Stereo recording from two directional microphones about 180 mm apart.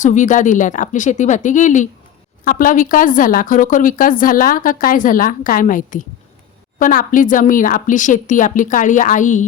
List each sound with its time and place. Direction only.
0.0 s speech: 45° left (ahead or behind)